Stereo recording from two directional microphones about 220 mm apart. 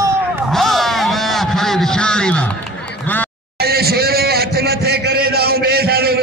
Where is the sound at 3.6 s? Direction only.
45° right (ahead or behind).